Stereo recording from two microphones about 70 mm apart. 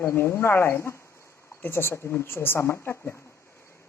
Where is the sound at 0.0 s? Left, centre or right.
Left.